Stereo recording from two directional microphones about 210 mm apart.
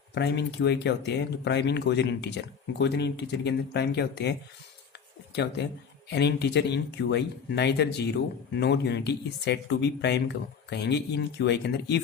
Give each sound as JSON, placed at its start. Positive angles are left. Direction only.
{"t": 0.1, "sound": "speech", "side_deg": 55}